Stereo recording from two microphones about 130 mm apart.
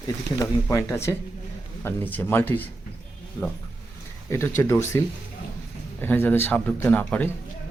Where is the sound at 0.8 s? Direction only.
20° left (ahead or behind).